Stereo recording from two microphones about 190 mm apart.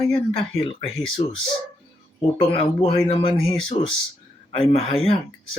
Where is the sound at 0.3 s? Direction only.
30° left (ahead or behind).